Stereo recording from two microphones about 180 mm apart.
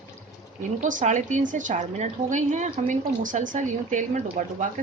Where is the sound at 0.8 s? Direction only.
45° right (ahead or behind).